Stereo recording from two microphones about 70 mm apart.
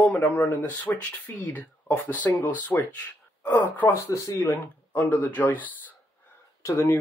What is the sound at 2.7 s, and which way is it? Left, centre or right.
Speech, left.